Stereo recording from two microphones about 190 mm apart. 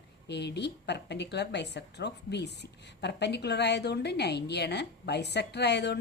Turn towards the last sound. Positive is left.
turn(degrees=60)  # may be behind; listen again after turning